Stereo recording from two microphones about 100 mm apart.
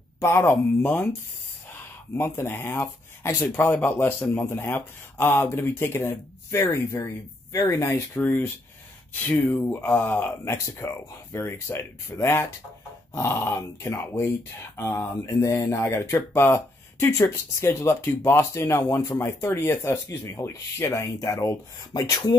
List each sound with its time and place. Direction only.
0.2 s speech: 25° left (ahead or behind)